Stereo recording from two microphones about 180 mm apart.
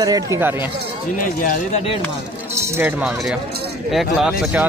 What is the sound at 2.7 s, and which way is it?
Speech, 10° right (ahead or behind).